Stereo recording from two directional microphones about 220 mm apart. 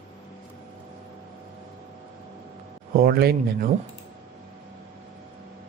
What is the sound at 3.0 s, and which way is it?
Speech, 45° right (ahead or behind).